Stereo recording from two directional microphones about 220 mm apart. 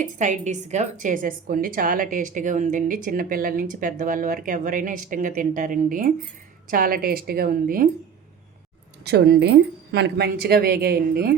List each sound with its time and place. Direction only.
0.0 s a woman's voice: 35° right (ahead or behind)
9.0 s a woman's voice: 45° right (ahead or behind)